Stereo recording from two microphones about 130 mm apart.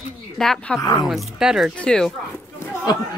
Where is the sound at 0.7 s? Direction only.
30° left (ahead or behind).